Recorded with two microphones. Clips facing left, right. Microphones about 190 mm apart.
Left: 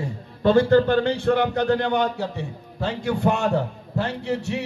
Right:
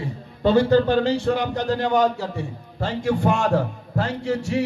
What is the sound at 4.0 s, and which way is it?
Speech, 65° left (ahead or behind).